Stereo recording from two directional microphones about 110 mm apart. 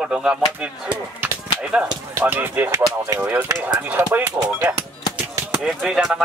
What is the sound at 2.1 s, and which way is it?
Speech, 20° right (ahead or behind).